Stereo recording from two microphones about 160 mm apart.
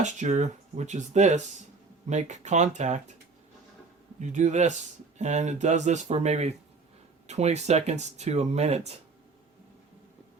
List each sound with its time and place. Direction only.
0.0 s speech: 50° right (ahead or behind)
4.2 s speech: 50° right (ahead or behind)